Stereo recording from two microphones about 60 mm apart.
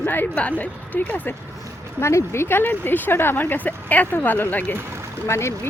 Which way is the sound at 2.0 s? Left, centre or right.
Left.